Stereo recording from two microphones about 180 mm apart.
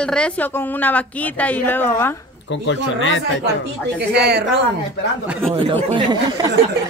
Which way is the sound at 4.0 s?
65° right (ahead or behind).